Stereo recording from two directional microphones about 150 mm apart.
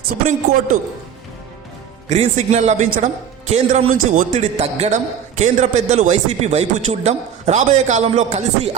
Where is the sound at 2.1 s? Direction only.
50° right (ahead or behind).